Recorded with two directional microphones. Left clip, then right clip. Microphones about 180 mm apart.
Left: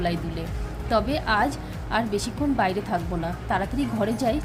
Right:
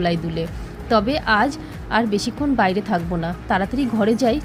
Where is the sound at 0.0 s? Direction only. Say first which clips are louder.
Right 6 dB; 25° right (ahead or behind).